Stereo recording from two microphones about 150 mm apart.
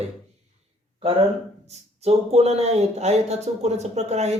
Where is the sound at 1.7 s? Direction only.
45° right (ahead or behind).